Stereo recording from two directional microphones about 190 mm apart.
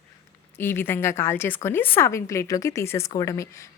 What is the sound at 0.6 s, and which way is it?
A woman's voice, 10° left (ahead or behind).